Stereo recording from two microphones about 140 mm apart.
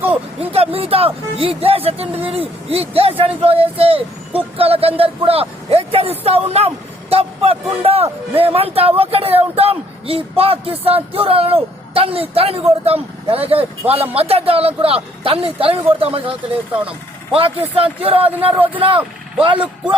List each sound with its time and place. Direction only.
0.3 s speech: 45° right (ahead or behind)
18.3 s speech: 15° right (ahead or behind)
18.8 s speech: 40° right (ahead or behind)